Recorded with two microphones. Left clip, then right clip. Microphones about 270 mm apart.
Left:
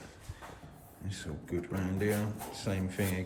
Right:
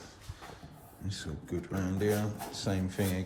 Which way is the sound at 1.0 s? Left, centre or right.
Centre.